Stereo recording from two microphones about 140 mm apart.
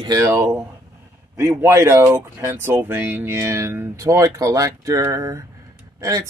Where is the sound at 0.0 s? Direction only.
25° right (ahead or behind).